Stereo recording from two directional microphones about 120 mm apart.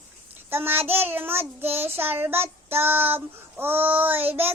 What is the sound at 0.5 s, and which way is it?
Child singing, 20° right (ahead or behind).